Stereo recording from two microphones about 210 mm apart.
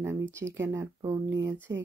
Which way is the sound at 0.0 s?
10° right (ahead or behind).